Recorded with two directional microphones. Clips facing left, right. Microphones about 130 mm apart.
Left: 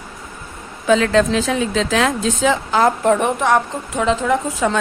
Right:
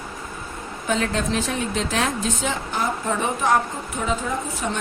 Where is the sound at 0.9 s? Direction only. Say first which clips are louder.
Left 9 dB; 90° left.